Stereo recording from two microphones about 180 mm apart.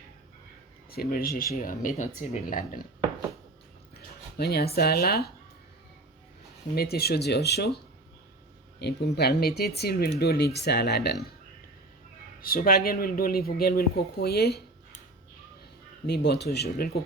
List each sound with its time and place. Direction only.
0.9 s speech: 55° left (ahead or behind)
3.9 s speech: 60° left (ahead or behind)
6.7 s speech: 60° left (ahead or behind)
8.8 s speech: 65° left (ahead or behind)
12.4 s speech: 55° left (ahead or behind)
16.0 s speech: 65° left (ahead or behind)